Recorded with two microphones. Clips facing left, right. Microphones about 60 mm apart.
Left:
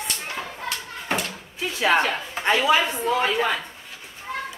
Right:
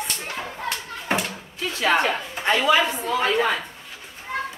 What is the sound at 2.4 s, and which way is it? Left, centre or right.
Speech, centre.